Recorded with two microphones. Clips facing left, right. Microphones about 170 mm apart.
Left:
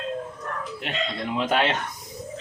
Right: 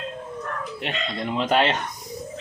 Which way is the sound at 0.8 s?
Centre (ahead or behind).